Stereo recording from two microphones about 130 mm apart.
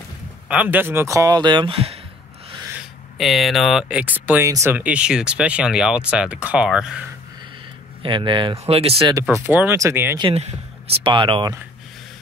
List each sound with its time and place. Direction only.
0.5 s speech: 10° right (ahead or behind); by 2.0 s 45° right (ahead or behind)
3.2 s speech: centre (ahead or behind)
4.0 s speech: 15° right (ahead or behind)
8.0 s speech: 40° right (ahead or behind)
9.3 s speech: 15° right (ahead or behind)
11.0 s speech: 40° right (ahead or behind)